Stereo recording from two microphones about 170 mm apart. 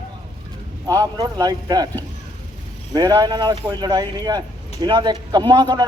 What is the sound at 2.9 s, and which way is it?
Speech, 25° right (ahead or behind).